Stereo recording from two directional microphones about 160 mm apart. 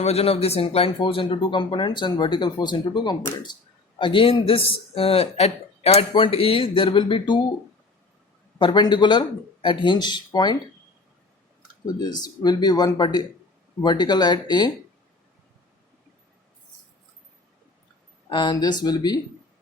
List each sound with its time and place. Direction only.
0.0 s speech: 40° left (ahead or behind)
8.5 s speech: 30° left (ahead or behind)
11.9 s speech: 25° left (ahead or behind)
18.3 s speech: 30° left (ahead or behind)